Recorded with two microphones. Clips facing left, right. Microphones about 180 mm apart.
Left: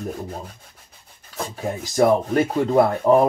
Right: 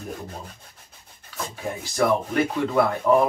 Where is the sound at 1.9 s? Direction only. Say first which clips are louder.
Left 5 dB; 35° left (ahead or behind).